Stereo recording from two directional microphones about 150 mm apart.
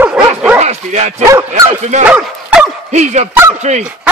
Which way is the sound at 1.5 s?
50° right (ahead or behind).